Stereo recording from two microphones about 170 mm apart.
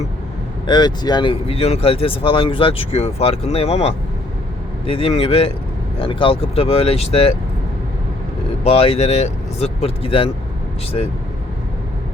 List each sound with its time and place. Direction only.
0.7 s speech: 25° left (ahead or behind)
8.6 s speech: 35° left (ahead or behind)